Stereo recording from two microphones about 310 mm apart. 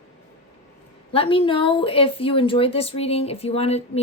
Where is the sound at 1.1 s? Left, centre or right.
Centre.